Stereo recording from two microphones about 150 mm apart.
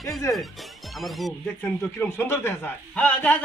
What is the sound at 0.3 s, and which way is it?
Speech, 15° left (ahead or behind).